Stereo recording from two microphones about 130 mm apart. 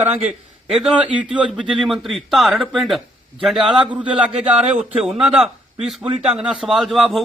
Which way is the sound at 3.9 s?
10° right (ahead or behind).